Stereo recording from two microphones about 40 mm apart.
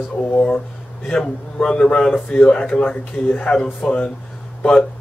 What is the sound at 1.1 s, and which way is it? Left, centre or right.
A man's voice, left.